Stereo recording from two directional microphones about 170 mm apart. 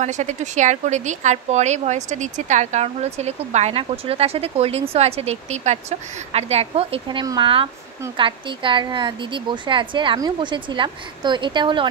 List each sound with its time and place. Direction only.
0.0 s a woman's voice: 45° right (ahead or behind)